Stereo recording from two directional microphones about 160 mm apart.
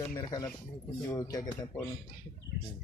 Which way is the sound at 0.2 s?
25° left (ahead or behind).